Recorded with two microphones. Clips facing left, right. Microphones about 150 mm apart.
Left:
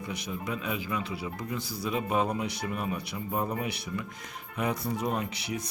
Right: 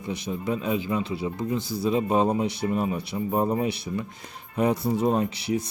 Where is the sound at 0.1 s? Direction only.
30° right (ahead or behind).